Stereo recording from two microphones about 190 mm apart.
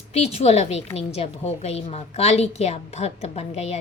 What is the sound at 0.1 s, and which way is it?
A woman's voice, 30° left (ahead or behind).